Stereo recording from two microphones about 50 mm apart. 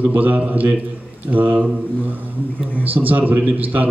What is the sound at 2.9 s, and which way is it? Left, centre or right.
Speech, right.